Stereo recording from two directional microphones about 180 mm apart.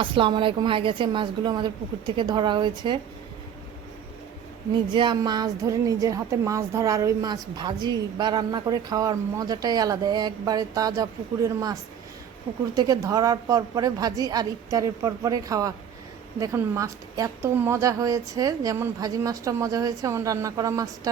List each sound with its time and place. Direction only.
0.0 s a woman's voice: 30° right (ahead or behind)
4.9 s a woman's voice: 25° right (ahead or behind)